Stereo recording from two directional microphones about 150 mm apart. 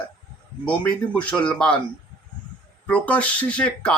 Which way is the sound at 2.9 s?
10° left (ahead or behind).